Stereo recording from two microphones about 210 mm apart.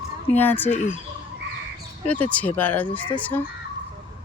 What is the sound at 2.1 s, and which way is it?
Speech, 5° left (ahead or behind).